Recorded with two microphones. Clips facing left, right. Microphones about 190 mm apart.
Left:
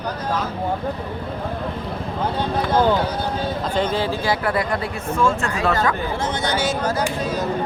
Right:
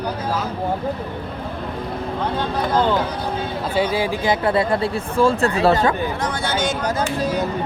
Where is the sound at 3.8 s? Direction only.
10° right (ahead or behind); by 5.7 s 35° right (ahead or behind).